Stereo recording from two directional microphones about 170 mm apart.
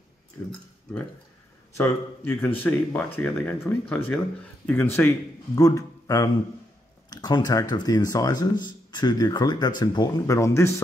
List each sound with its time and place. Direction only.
0.4 s speech: 15° left (ahead or behind)
1.8 s speech: 15° left (ahead or behind)